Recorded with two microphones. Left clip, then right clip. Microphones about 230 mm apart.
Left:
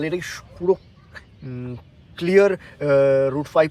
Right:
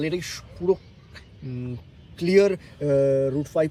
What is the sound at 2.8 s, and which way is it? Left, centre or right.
Speech, left.